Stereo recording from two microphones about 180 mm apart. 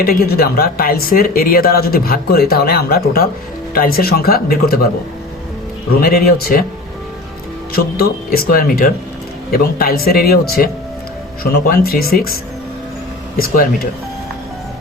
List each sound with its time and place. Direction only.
0.0 s speech: 60° left (ahead or behind)
6.0 s speech: 55° left (ahead or behind)
7.7 s speech: 55° left (ahead or behind)